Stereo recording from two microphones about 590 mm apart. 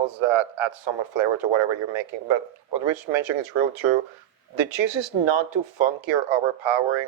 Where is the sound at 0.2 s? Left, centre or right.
Right.